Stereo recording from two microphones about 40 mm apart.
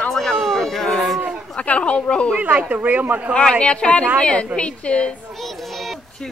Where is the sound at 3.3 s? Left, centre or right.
Left.